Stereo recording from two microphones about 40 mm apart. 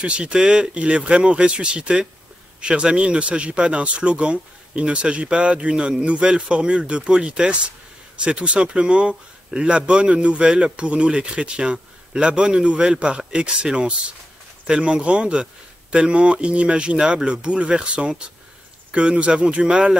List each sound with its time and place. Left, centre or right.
0.0 s speech: right